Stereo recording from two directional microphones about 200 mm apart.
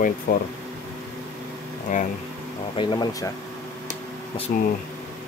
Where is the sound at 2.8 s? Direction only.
20° left (ahead or behind).